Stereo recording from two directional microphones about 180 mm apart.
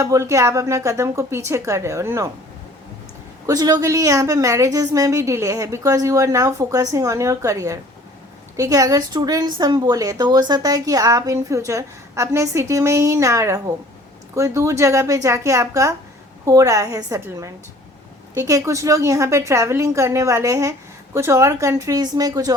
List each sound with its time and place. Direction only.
0.0 s a woman's voice: 15° right (ahead or behind)
3.4 s a woman's voice: 20° right (ahead or behind)